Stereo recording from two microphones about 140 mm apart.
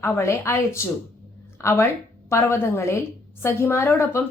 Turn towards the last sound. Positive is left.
turn(degrees=15)  # may be behind; listen again after turning